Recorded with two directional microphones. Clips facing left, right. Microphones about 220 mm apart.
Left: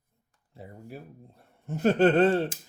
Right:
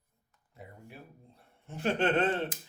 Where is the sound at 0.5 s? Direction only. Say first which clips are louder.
Left 6 dB; 30° left (ahead or behind).